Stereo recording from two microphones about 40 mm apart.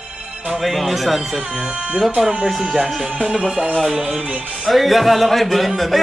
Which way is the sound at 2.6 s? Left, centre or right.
Centre.